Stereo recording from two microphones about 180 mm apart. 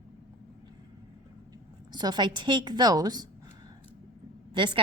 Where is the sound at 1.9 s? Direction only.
25° right (ahead or behind).